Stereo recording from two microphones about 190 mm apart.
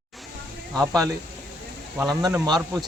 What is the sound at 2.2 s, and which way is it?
Speech, 20° right (ahead or behind).